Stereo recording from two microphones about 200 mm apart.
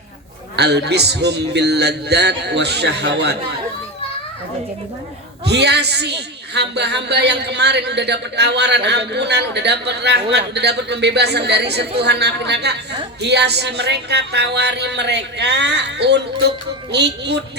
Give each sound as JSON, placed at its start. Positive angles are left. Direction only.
{"t": 0.5, "sound": "a woman's voice", "side_deg": -55}
{"t": 5.5, "sound": "a woman's voice", "side_deg": -55}